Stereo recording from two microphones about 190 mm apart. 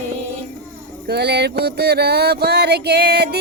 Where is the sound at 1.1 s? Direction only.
60° right (ahead or behind).